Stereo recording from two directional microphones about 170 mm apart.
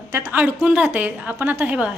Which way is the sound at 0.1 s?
15° right (ahead or behind).